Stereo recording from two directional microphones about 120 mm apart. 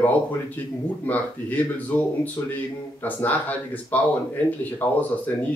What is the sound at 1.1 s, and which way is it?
Speech, 15° left (ahead or behind).